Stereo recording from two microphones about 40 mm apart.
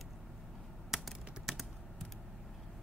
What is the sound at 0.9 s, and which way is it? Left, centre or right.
Typing, centre.